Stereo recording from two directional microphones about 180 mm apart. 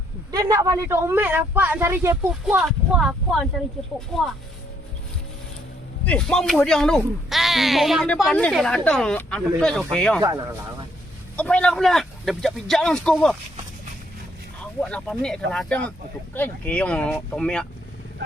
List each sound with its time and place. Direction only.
0.3 s speech: 20° right (ahead or behind)
2.6 s speech: centre (ahead or behind)
6.1 s speech: 5° left (ahead or behind)
10.2 s speech: 20° right (ahead or behind)
11.3 s speech: 5° left (ahead or behind)
14.6 s speech: 5° left (ahead or behind)